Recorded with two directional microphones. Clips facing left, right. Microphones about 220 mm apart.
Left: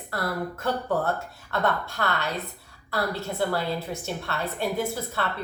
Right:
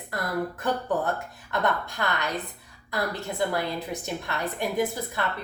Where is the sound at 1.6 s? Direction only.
15° right (ahead or behind).